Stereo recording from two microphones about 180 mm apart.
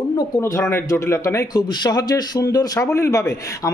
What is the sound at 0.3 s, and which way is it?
A man's voice, 15° left (ahead or behind).